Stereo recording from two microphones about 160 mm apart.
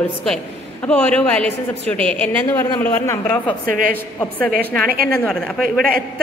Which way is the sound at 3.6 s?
60° right (ahead or behind).